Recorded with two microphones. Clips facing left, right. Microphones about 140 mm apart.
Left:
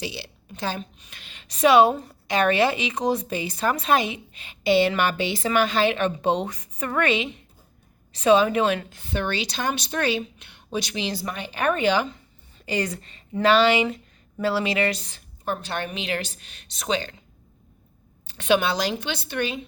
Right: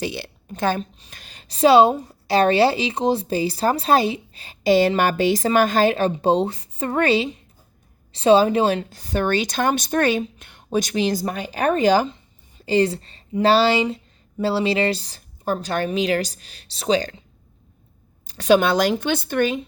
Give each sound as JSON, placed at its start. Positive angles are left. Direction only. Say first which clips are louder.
{"t": 0.0, "sound": "a woman's voice", "louder": "right 6 dB", "side_deg": -50}
{"t": 0.9, "sound": "a woman's voice", "louder": "right 2 dB", "side_deg": -35}
{"t": 18.3, "sound": "a woman's voice", "louder": "right 5 dB", "side_deg": -40}